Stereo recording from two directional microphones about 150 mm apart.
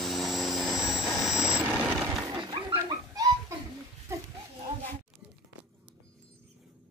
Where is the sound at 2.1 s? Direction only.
25° right (ahead or behind).